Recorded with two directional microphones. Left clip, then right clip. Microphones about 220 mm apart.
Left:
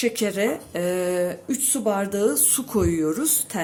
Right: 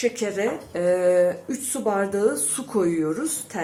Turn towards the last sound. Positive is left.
turn(degrees=45)  # may be behind; listen again after turning